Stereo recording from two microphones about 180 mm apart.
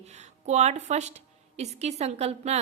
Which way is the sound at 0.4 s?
40° right (ahead or behind).